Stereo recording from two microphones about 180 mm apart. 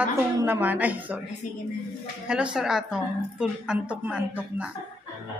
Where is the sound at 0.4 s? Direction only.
10° right (ahead or behind).